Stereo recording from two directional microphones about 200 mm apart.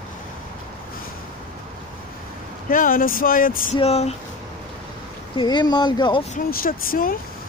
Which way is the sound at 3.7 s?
30° left (ahead or behind).